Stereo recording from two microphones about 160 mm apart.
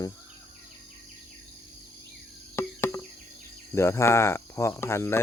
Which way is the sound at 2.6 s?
15° left (ahead or behind).